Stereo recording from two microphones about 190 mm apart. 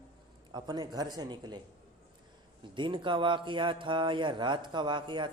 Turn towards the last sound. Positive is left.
turn(degrees=-25)  # may be behind; listen again after turning